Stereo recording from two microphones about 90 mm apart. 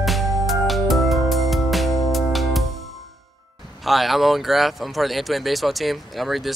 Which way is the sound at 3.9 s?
Centre (ahead or behind).